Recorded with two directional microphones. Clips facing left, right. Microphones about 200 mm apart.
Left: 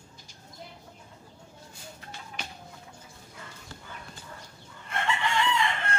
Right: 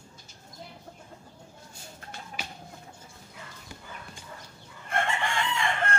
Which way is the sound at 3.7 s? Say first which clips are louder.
Right 2 dB; 15° right (ahead or behind).